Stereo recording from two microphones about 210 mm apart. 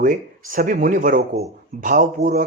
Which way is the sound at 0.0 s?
40° right (ahead or behind).